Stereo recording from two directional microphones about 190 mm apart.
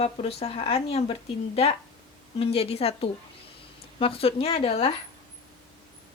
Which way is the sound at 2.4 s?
30° left (ahead or behind).